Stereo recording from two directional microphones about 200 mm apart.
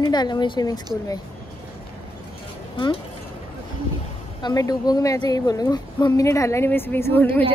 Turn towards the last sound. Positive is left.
turn(degrees=10)  # may be behind; listen again after turning